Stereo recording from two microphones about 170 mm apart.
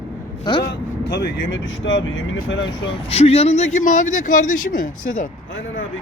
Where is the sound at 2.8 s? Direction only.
35° left (ahead or behind); by 5.3 s 55° left (ahead or behind).